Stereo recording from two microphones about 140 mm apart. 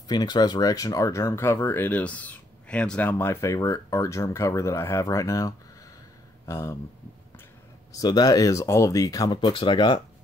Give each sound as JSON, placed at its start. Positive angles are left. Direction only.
{"t": 0.1, "sound": "speech", "side_deg": 30}
{"t": 7.9, "sound": "speech", "side_deg": 30}